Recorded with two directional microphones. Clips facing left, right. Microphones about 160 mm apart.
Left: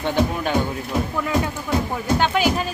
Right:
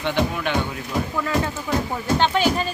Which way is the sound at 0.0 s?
45° left (ahead or behind).